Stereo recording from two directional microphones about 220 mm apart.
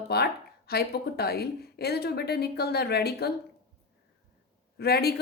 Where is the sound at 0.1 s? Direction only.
45° left (ahead or behind).